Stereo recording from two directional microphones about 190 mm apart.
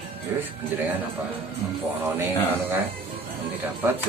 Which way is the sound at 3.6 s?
10° right (ahead or behind).